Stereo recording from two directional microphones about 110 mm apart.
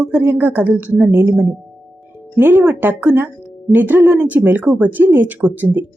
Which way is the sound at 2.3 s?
15° right (ahead or behind).